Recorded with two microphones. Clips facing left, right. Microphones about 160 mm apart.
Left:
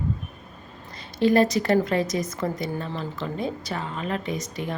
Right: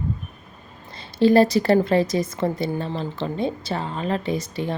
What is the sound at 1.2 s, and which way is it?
A woman's voice, 30° right (ahead or behind).